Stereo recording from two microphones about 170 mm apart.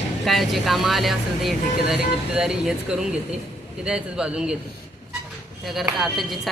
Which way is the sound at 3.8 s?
5° right (ahead or behind).